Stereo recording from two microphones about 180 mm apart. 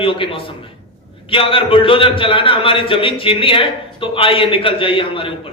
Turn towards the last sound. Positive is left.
turn(degrees=30)  # may be behind; listen again after turning